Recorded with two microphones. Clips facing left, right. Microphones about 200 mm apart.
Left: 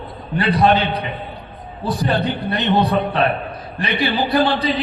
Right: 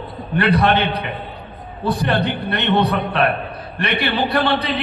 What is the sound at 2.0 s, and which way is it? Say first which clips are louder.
A man's voice: left 3 dB; 65° right (ahead or behind).